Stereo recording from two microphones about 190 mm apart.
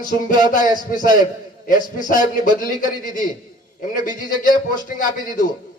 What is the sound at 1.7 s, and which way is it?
A man's voice, 45° left (ahead or behind).